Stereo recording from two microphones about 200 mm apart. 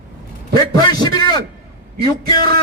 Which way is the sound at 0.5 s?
20° left (ahead or behind).